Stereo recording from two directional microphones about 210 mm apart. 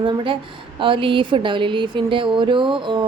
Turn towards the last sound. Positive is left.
turn(degrees=-20)  # may be behind; listen again after turning